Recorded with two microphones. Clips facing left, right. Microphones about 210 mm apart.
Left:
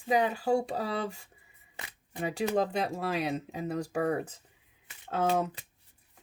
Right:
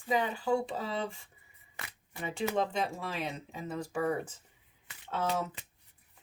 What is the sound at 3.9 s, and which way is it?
Speech, 55° left (ahead or behind).